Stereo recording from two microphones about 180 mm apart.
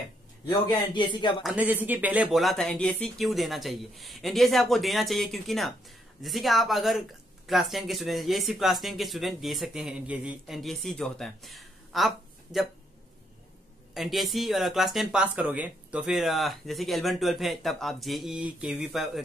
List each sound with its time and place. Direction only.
0.5 s speech: 25° left (ahead or behind)
1.4 s speech: 5° right (ahead or behind)
13.9 s speech: centre (ahead or behind)